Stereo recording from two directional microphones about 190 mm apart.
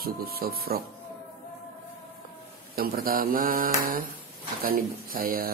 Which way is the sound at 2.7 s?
50° right (ahead or behind).